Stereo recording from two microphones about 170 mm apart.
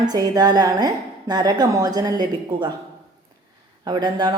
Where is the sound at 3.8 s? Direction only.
25° right (ahead or behind).